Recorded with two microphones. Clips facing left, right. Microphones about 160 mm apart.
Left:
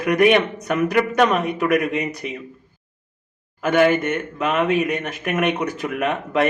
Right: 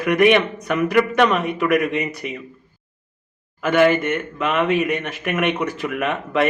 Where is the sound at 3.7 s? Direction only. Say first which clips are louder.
Right 1 dB; 45° left (ahead or behind).